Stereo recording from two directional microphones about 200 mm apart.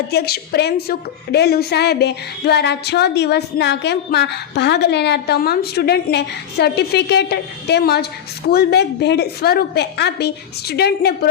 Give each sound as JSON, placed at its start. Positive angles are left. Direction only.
{"t": 0.1, "sound": "a woman's voice", "side_deg": 50}